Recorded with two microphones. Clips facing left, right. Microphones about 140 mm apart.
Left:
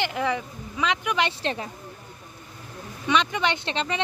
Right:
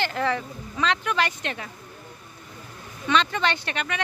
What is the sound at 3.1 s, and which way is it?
Speech, 15° left (ahead or behind).